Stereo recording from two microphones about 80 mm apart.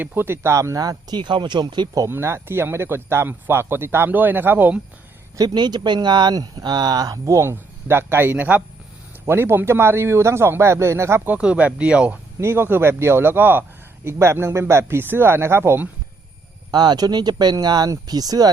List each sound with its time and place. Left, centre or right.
0.0 s a man's voice: right
1.1 s speech: right
2.0 s speech: right
5.4 s speech: right
9.2 s a man's voice: right
11.3 s speech: centre
12.4 s a man's voice: right
16.7 s speech: right